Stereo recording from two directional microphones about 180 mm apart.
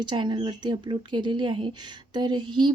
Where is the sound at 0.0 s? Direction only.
25° right (ahead or behind).